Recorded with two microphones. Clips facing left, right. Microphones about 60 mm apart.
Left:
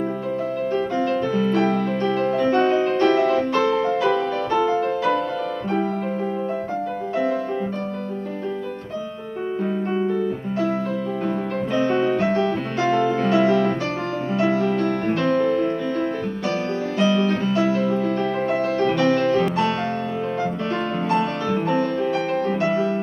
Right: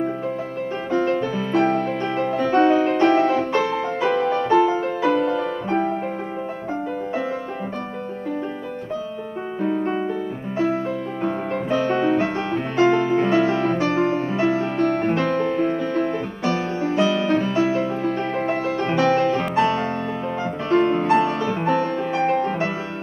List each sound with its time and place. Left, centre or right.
0.9 s music: right
9.9 s music: centre
11.2 s music: right